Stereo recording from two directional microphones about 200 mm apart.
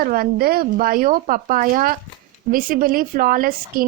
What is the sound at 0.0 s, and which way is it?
Speech, 50° right (ahead or behind).